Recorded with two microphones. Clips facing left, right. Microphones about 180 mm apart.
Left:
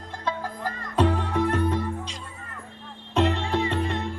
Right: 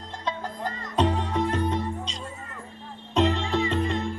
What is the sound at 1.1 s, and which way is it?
Music, 55° left (ahead or behind).